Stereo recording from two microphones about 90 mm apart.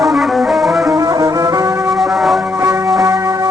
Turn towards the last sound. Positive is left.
turn(degrees=-35)  # may be behind; listen again after turning